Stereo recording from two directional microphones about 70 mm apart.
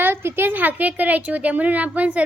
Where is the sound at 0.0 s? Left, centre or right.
Right.